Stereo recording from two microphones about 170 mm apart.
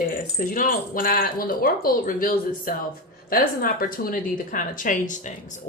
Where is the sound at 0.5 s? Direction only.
55° left (ahead or behind).